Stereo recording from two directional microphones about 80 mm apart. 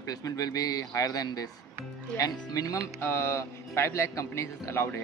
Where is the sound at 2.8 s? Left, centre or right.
Left.